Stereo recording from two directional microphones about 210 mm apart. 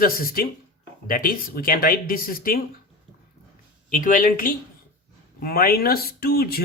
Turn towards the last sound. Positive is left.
turn(degrees=45)  # may be behind; listen again after turning